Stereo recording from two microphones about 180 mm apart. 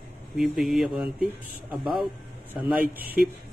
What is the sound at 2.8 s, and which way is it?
Speech, 55° right (ahead or behind).